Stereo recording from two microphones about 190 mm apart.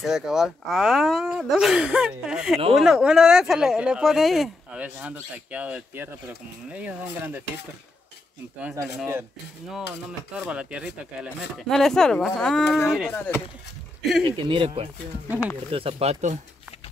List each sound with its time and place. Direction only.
0.0 s speech: centre (ahead or behind)
8.5 s speech: 5° right (ahead or behind)
10.3 s speech: 5° right (ahead or behind)
14.2 s speech: 25° right (ahead or behind)